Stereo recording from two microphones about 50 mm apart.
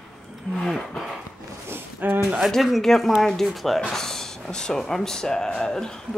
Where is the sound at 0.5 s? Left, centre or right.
Centre.